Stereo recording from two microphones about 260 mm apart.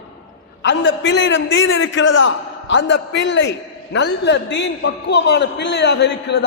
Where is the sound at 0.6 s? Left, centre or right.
Left.